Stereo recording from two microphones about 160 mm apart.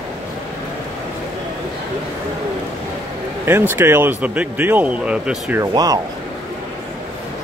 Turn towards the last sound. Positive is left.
turn(degrees=-20)  # may be behind; listen again after turning